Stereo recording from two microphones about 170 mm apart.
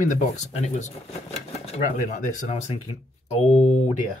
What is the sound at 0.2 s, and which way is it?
Speech, 40° left (ahead or behind).